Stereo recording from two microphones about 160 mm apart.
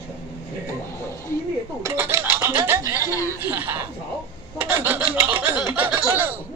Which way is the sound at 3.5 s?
10° right (ahead or behind).